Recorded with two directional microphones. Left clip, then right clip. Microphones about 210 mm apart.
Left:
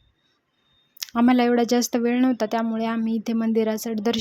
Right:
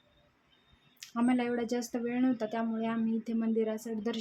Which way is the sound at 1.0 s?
40° left (ahead or behind).